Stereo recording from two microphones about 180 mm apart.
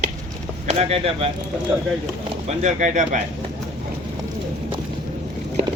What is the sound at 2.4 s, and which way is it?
Speech, 40° right (ahead or behind).